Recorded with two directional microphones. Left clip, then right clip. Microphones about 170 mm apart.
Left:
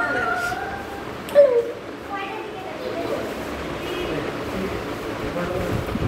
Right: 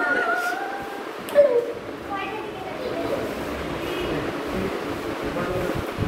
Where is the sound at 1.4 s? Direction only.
90° left.